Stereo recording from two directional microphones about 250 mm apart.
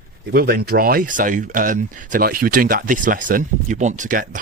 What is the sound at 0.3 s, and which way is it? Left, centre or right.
A man's voice, right.